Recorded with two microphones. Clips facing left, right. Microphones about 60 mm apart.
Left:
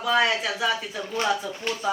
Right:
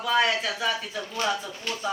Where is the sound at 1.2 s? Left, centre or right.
Centre.